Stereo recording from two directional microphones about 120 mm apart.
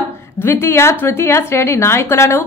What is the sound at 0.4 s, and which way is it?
A woman's voice, 20° left (ahead or behind).